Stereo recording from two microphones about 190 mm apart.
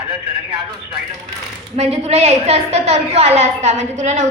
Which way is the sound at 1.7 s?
35° right (ahead or behind).